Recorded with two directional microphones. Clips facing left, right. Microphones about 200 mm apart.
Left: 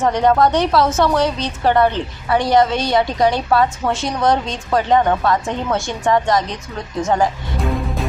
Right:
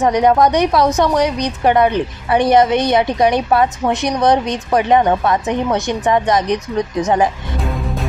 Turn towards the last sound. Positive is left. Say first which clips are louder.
# right 3 dB
turn(degrees=-20)  # may be behind; listen again after turning